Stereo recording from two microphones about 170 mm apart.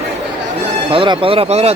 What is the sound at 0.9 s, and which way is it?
Speech, 30° right (ahead or behind).